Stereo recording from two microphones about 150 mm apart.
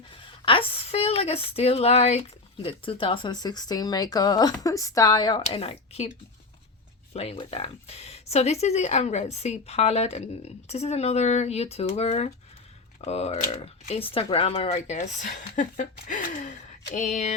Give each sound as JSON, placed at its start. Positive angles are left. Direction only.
{"t": 0.4, "sound": "speech", "side_deg": 35}
{"t": 5.4, "sound": "speech", "side_deg": 40}
{"t": 7.1, "sound": "speech", "side_deg": 45}
{"t": 14.8, "sound": "speech", "side_deg": 50}